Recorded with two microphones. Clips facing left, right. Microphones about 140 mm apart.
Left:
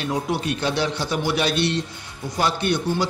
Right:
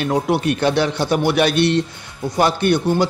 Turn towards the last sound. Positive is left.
turn(degrees=-55)  # may be behind; listen again after turning